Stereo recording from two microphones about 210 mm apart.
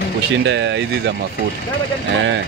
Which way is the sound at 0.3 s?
60° right (ahead or behind).